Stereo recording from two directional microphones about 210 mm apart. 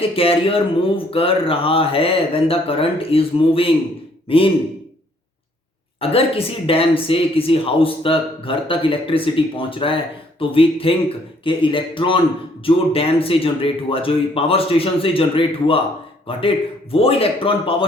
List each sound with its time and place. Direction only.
0.2 s speech: 25° left (ahead or behind)
6.0 s speech: 25° left (ahead or behind)